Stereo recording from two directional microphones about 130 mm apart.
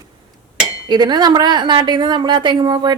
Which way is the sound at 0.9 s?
35° right (ahead or behind).